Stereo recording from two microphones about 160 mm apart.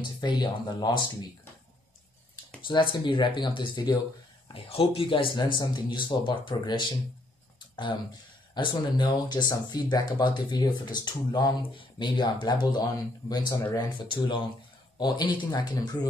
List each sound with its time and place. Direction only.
0.2 s speech: 25° left (ahead or behind)
2.6 s speech: 30° left (ahead or behind)